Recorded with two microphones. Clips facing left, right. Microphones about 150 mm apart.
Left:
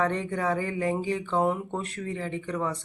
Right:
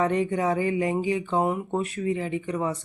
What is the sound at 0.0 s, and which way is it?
Speech, 15° right (ahead or behind).